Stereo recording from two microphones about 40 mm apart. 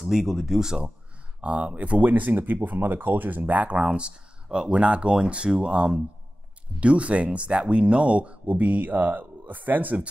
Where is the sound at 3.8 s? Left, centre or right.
Right.